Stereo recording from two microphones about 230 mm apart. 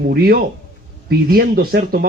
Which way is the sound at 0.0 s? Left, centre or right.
Right.